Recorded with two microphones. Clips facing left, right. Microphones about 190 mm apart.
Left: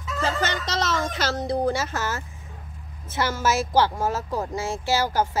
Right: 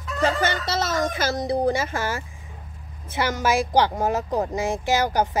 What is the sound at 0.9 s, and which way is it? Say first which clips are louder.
Speech: right 2 dB; 10° right (ahead or behind).